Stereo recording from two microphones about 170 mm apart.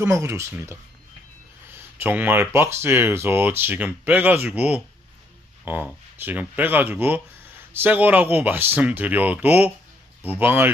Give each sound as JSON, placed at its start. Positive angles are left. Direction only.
{"t": 0.0, "sound": "speech", "side_deg": -15}